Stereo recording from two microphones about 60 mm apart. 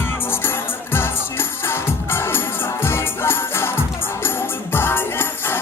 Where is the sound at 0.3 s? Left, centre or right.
Left.